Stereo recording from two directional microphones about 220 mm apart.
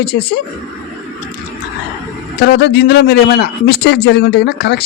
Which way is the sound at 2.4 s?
50° left (ahead or behind).